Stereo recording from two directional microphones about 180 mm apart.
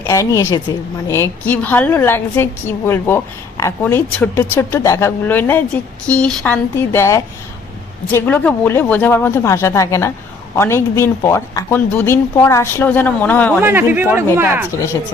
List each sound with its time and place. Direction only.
0.0 s a woman's voice: 15° left (ahead or behind)
13.6 s speech: 10° right (ahead or behind)